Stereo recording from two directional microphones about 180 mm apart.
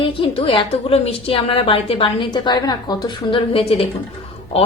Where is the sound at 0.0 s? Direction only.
30° left (ahead or behind).